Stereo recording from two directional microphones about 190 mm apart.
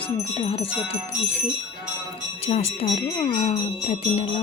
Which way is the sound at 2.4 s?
35° left (ahead or behind).